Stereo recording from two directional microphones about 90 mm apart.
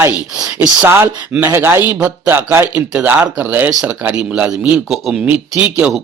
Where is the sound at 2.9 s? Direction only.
15° right (ahead or behind).